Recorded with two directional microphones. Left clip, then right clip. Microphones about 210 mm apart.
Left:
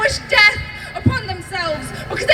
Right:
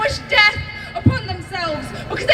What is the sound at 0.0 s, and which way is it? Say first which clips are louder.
Music: left 2 dB; 45° left (ahead or behind).